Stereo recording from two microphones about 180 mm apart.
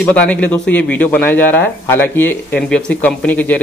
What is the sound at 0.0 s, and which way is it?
Speech, 5° left (ahead or behind).